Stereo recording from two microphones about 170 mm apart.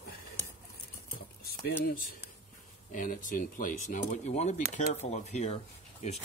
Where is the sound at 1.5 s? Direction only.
65° left (ahead or behind).